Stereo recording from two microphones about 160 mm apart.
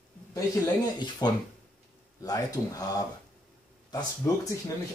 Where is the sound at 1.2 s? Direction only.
25° left (ahead or behind).